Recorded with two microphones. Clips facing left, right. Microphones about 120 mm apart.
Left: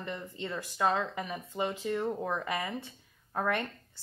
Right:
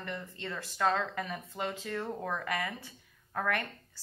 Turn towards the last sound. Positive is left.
turn(degrees=25)  # may be behind; listen again after turning